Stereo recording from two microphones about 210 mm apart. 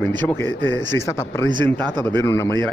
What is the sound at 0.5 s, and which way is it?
Speech, 65° left (ahead or behind).